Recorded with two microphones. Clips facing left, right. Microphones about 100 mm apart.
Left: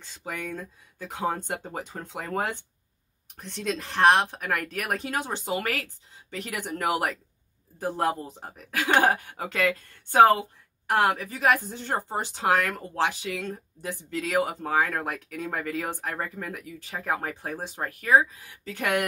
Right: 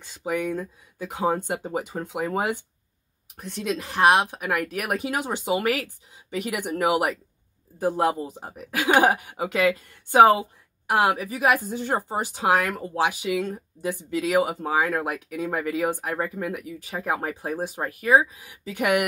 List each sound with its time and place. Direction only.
0.0 s speech: 10° right (ahead or behind)